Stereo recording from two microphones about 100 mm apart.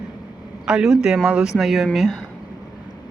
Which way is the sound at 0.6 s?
5° right (ahead or behind).